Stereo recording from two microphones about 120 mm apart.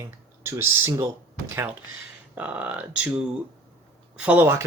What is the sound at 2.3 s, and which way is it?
Speech, 10° right (ahead or behind).